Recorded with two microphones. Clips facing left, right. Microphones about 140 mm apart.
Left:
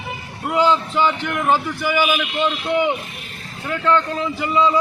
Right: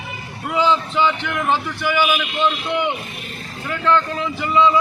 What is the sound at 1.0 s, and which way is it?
Speech, 40° left (ahead or behind).